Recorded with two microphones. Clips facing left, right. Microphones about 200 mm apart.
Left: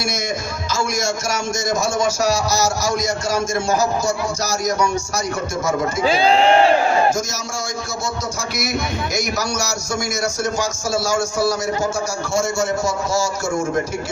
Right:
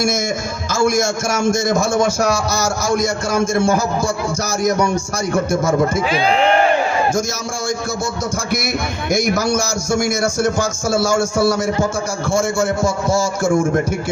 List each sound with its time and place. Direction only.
0.7 s a man's voice: 50° right (ahead or behind)
6.0 s speech: 30° left (ahead or behind)
8.5 s a man's voice: 55° right (ahead or behind)